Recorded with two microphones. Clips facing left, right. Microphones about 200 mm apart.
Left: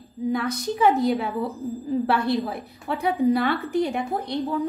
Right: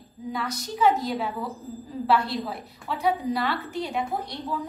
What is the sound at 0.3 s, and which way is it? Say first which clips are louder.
A woman's voice: left 6 dB; 55° left (ahead or behind).